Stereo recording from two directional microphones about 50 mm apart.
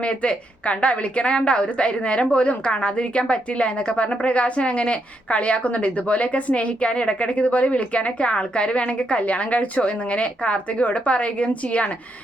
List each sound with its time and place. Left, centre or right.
0.0 s a woman's voice: left